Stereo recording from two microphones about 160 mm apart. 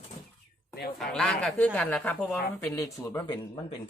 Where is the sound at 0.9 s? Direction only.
5° left (ahead or behind).